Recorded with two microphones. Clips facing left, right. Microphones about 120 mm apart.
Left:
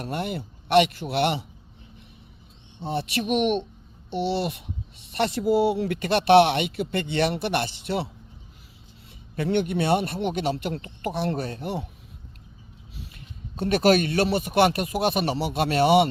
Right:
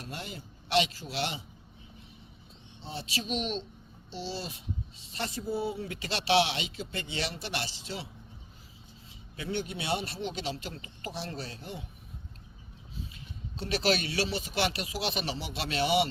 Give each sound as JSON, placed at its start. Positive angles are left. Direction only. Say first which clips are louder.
{"t": 0.0, "sound": "speech", "louder": "left 12 dB", "side_deg": 60}
{"t": 2.8, "sound": "speech", "louder": "left 10 dB", "side_deg": 60}
{"t": 9.3, "sound": "speech", "louder": "left 11 dB", "side_deg": 60}
{"t": 13.6, "sound": "speech", "louder": "left 9 dB", "side_deg": 55}